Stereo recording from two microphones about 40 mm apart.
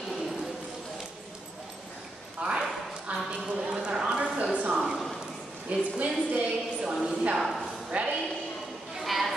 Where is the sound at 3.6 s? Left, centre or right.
Centre.